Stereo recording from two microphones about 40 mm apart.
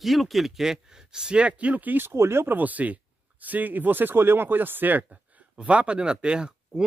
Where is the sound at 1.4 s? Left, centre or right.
Right.